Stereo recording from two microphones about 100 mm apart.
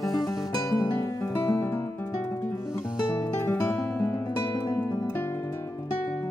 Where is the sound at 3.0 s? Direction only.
30° left (ahead or behind).